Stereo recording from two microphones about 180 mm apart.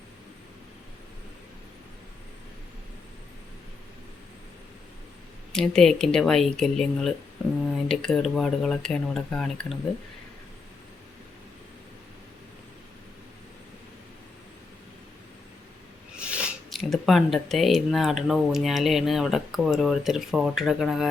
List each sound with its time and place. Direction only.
5.5 s speech: 5° left (ahead or behind)
16.1 s speech: 5° right (ahead or behind)